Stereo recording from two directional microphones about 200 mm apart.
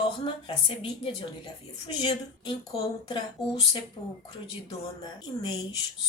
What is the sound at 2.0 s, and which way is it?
A woman's voice, 25° left (ahead or behind).